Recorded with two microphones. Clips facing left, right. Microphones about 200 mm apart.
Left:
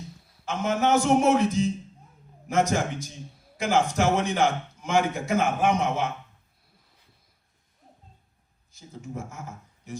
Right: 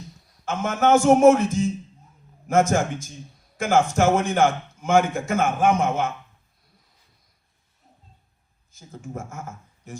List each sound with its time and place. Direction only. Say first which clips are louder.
0.4 s a man's voice: right 3 dB; 50° right (ahead or behind)
8.7 s speech: right 2 dB; 45° right (ahead or behind)